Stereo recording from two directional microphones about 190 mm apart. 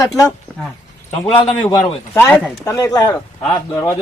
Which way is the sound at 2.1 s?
10° left (ahead or behind).